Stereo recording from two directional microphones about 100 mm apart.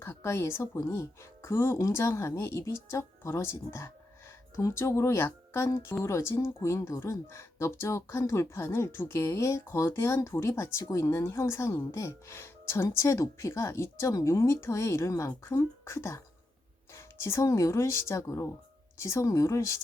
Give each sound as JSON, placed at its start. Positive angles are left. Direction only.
{"t": 0.0, "sound": "speech", "side_deg": 25}